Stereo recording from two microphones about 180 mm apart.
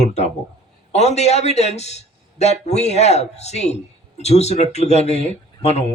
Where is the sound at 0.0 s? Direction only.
40° left (ahead or behind).